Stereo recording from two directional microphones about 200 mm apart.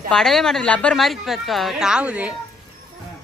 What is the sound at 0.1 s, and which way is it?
A woman's voice, centre (ahead or behind).